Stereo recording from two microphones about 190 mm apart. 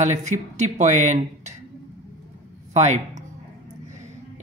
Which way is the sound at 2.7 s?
35° right (ahead or behind).